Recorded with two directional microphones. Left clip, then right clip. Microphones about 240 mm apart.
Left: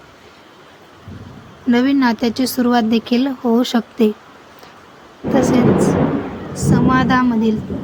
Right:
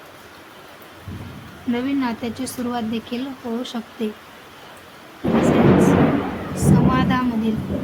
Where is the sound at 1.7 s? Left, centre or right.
Left.